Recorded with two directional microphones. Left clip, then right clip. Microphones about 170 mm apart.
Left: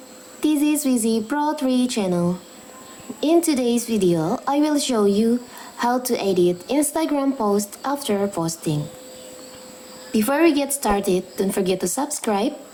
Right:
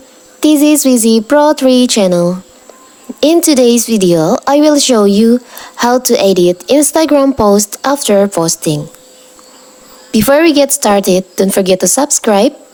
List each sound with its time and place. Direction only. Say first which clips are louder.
0.3 s a woman's voice: right 12 dB; 55° right (ahead or behind)
10.1 s a woman's voice: right 10 dB; 50° right (ahead or behind)